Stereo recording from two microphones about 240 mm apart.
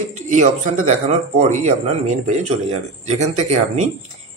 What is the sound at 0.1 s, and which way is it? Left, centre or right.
A man's voice, right.